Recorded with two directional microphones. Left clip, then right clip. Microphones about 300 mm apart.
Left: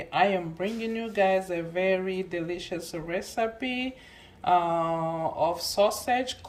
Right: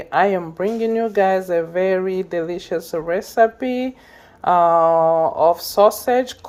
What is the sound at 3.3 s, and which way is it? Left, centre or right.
Speech, right.